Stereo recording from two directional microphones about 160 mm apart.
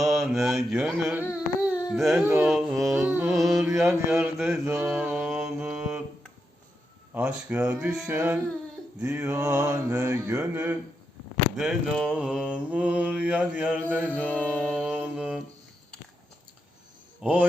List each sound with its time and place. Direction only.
0.0 s mantra: centre (ahead or behind)
1.3 s a sound: 10° right (ahead or behind)
1.9 s mantra: centre (ahead or behind)
2.2 s mantra: 15° right (ahead or behind)
2.5 s mantra: centre (ahead or behind)
3.1 s mantra: 10° right (ahead or behind)
3.3 s mantra: centre (ahead or behind)
3.8 s mantra: 15° right (ahead or behind)
7.1 s mantra: 10° right (ahead or behind)
11.5 s mantra: centre (ahead or behind)
14.0 s mantra: 10° left (ahead or behind)
14.9 s mantra: 5° right (ahead or behind)
17.2 s mantra: 10° right (ahead or behind)